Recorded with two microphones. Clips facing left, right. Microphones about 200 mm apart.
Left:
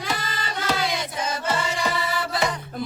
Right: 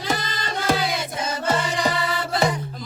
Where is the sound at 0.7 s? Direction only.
50° right (ahead or behind).